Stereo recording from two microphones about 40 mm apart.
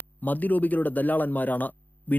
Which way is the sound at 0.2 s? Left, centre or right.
Left.